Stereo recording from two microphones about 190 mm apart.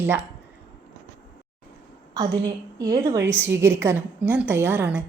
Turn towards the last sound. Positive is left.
turn(degrees=-10)  # may be behind; listen again after turning